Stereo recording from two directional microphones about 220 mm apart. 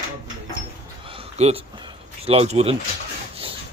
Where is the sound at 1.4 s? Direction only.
30° right (ahead or behind).